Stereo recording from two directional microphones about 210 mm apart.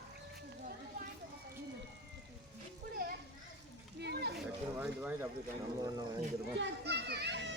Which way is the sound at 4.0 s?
50° right (ahead or behind).